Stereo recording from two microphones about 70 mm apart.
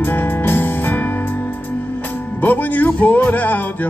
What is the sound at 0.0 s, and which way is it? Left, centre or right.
Music, left.